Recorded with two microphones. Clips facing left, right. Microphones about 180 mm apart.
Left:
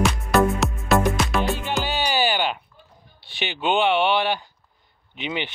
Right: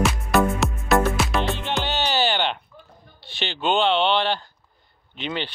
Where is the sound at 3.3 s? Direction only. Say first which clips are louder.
Even; 15° left (ahead or behind).